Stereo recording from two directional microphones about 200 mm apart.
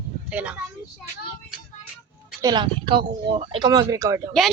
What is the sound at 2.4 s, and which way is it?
Speech, 20° right (ahead or behind).